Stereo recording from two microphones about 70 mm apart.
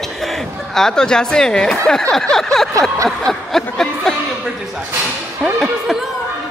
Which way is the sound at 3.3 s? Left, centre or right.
Centre.